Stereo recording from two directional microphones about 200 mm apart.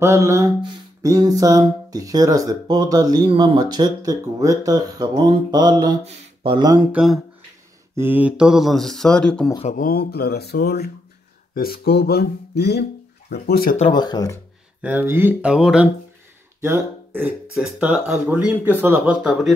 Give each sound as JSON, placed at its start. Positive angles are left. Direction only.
{"t": 0.0, "sound": "mantra", "side_deg": -15}
{"t": 6.0, "sound": "speech", "side_deg": -25}
{"t": 6.9, "sound": "speech", "side_deg": -5}
{"t": 9.7, "sound": "speech", "side_deg": 45}
{"t": 13.7, "sound": "speech", "side_deg": 25}
{"t": 14.8, "sound": "speech", "side_deg": -10}